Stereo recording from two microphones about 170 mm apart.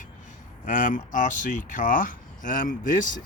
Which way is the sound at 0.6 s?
50° left (ahead or behind).